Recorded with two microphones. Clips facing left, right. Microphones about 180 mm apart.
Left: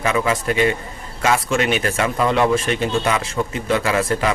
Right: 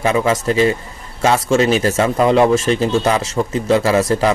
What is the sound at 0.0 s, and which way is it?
Speech, 30° right (ahead or behind).